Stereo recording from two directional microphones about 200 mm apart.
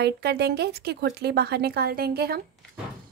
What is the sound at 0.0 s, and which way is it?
Speech, 55° right (ahead or behind).